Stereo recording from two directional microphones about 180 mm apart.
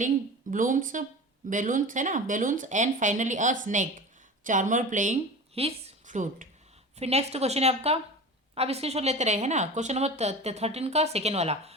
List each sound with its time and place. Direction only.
0.5 s speech: 45° right (ahead or behind)